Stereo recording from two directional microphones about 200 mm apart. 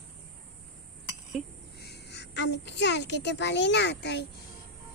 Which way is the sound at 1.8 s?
55° left (ahead or behind).